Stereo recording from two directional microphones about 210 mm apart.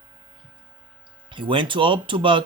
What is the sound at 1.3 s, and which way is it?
Speech, 25° right (ahead or behind).